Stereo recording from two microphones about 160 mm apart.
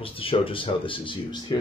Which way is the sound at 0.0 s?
35° left (ahead or behind).